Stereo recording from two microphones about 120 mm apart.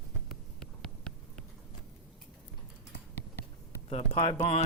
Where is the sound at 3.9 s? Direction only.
50° left (ahead or behind).